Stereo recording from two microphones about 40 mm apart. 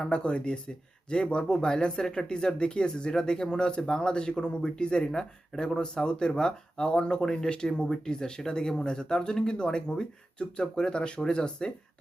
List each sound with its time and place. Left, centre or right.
0.0 s speech: left